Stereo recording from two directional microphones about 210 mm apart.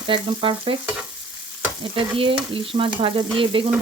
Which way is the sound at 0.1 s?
25° right (ahead or behind).